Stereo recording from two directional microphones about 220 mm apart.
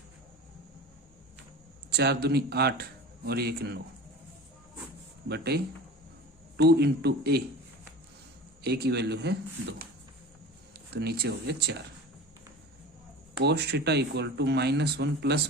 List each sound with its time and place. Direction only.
1.9 s speech: 50° right (ahead or behind)
5.3 s speech: 45° right (ahead or behind)
8.6 s speech: 45° right (ahead or behind)
10.9 s speech: 45° right (ahead or behind)
13.4 s speech: 50° right (ahead or behind)